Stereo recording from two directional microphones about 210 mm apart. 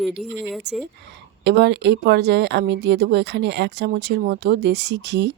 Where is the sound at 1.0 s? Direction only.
55° right (ahead or behind).